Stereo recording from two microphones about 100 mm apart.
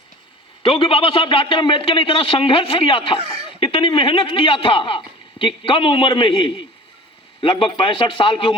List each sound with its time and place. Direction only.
0.6 s speech: 60° left (ahead or behind)
7.6 s speech: 55° left (ahead or behind)